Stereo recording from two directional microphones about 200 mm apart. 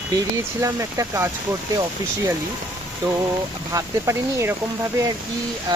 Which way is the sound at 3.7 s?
15° right (ahead or behind).